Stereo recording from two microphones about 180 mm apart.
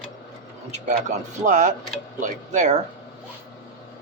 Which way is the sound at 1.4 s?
45° right (ahead or behind).